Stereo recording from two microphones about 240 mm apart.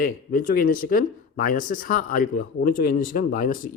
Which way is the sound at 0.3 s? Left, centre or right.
Left.